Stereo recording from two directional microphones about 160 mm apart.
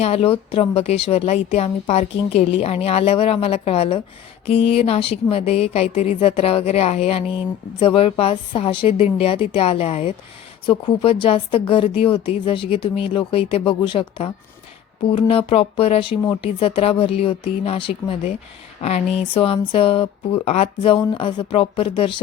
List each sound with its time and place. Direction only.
0.0 s a woman's voice: 40° left (ahead or behind)